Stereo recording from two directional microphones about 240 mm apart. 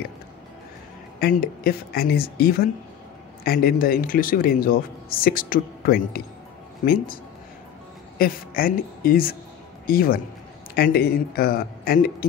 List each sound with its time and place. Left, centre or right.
1.2 s a man's voice: left
8.2 s a man's voice: left